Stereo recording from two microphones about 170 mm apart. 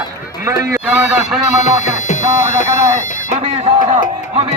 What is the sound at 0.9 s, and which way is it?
Speech, 5° right (ahead or behind).